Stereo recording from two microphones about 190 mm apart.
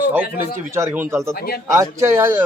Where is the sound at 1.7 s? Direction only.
15° right (ahead or behind).